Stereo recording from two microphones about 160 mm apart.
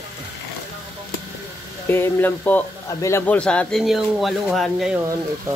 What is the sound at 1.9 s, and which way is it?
A man's voice, 15° left (ahead or behind).